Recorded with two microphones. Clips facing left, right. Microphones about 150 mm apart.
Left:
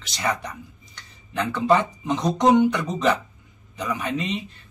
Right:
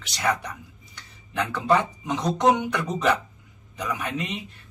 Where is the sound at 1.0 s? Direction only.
10° right (ahead or behind).